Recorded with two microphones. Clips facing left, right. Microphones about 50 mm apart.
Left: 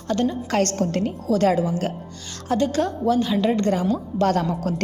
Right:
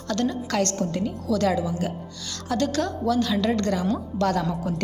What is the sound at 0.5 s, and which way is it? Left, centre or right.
Speech, left.